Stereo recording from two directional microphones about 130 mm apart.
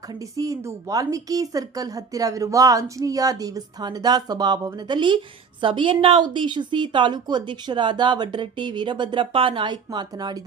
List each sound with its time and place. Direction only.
0.1 s speech: 25° right (ahead or behind)